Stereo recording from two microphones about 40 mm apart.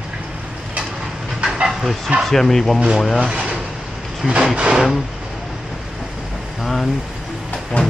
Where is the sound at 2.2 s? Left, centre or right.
Centre.